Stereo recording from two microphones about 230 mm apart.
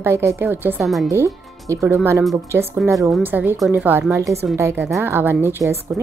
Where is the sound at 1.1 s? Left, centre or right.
Centre.